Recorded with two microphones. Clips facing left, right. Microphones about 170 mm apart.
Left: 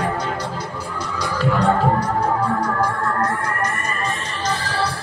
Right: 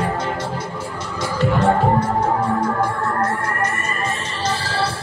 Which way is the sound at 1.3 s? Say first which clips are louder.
Right 2 dB; 20° right (ahead or behind).